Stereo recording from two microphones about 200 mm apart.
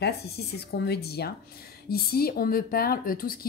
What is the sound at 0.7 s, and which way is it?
Speech, 55° left (ahead or behind).